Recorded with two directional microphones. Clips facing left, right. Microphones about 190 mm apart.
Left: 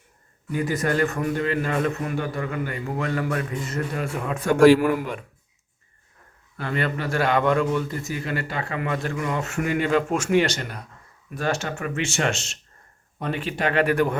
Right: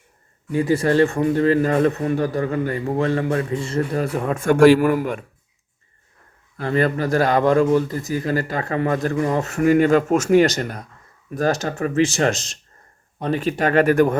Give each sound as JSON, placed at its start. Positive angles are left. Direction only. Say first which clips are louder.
{"t": 0.5, "sound": "a man's voice", "louder": "right 6 dB", "side_deg": -30}
{"t": 6.6, "sound": "a man's voice", "louder": "right 7 dB", "side_deg": -35}